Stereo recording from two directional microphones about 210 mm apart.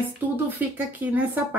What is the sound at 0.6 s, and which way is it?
Speech, 10° right (ahead or behind).